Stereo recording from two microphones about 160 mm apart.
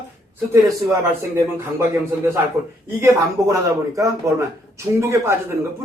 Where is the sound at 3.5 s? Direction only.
20° right (ahead or behind).